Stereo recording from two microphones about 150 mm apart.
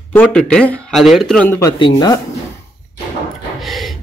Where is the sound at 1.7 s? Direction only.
30° left (ahead or behind).